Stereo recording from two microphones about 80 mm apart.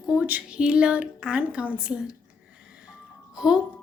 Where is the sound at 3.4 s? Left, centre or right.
Centre.